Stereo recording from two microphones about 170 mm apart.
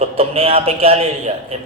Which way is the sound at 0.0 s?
35° right (ahead or behind).